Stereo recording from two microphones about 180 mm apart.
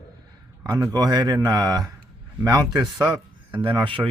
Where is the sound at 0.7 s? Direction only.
20° right (ahead or behind).